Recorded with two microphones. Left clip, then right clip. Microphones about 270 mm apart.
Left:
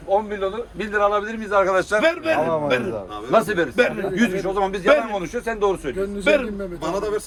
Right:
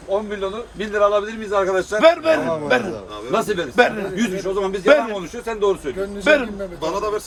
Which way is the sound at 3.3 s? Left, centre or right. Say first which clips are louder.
Even; centre.